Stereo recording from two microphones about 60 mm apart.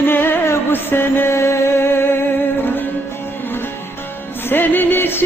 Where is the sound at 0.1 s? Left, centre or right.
Left.